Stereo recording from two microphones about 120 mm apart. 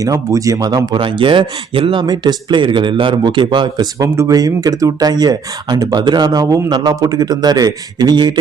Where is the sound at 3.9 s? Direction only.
25° right (ahead or behind).